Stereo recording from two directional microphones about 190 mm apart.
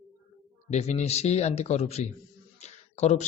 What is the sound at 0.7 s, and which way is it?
A man's voice, 35° left (ahead or behind).